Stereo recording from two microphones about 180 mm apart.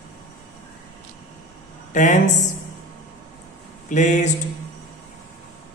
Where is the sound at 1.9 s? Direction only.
45° left (ahead or behind).